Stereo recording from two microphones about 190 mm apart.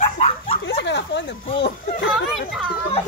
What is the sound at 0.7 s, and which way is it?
Speech, 70° left (ahead or behind).